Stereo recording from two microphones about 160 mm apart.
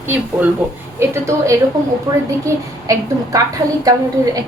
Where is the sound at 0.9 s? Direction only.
15° right (ahead or behind).